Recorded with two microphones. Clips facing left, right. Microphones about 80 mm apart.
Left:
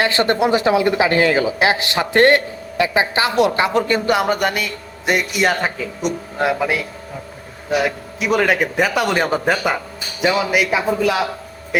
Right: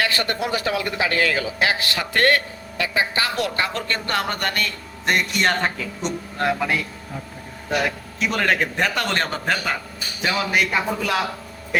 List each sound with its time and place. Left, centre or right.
0.0 s a man's voice: left; by 11.3 s centre